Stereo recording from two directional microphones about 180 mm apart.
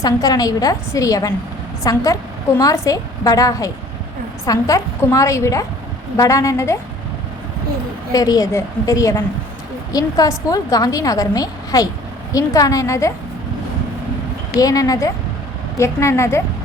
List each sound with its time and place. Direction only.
0.0 s a woman's voice: 20° left (ahead or behind)
8.1 s a woman's voice: 20° left (ahead or behind)
14.6 s a woman's voice: 20° left (ahead or behind)